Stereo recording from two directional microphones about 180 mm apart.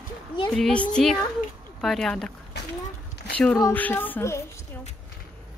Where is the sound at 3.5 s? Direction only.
15° left (ahead or behind).